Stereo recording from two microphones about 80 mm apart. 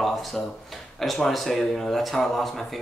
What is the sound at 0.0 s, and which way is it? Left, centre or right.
Speech, centre.